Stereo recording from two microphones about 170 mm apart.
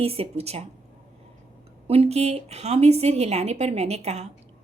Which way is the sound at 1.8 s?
35° right (ahead or behind).